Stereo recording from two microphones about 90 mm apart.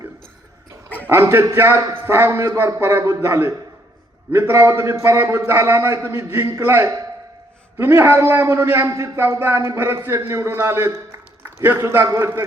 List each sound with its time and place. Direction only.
0.9 s a man's voice: 25° right (ahead or behind)
12.0 s a man's voice: 35° right (ahead or behind)